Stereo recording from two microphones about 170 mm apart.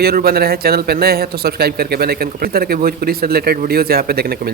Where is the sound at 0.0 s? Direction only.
65° right (ahead or behind).